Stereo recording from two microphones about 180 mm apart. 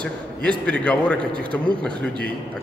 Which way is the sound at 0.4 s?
5° left (ahead or behind).